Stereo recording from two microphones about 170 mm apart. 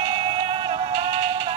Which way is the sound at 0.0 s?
30° right (ahead or behind).